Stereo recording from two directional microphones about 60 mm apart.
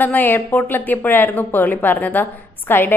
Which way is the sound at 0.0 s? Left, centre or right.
Left.